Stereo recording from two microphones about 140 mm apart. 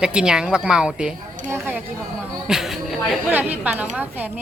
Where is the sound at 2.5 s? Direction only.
Centre (ahead or behind).